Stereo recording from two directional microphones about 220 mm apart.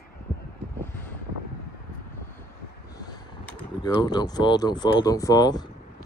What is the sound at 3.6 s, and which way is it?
Speech, 20° left (ahead or behind).